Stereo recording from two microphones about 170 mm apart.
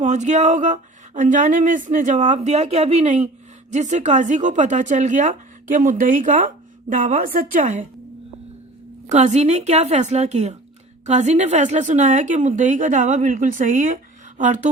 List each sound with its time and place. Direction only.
0.0 s speech: 45° right (ahead or behind)
9.1 s a woman's voice: 40° right (ahead or behind)